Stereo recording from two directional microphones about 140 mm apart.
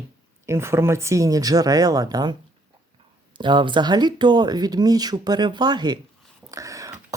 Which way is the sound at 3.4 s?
35° right (ahead or behind).